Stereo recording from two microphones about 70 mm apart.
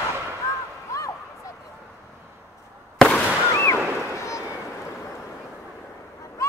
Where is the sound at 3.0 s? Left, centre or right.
Centre.